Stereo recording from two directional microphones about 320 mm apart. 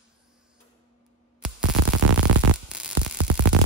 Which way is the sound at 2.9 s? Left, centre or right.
Right.